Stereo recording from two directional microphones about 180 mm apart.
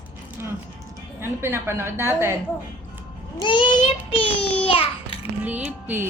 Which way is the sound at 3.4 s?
25° left (ahead or behind).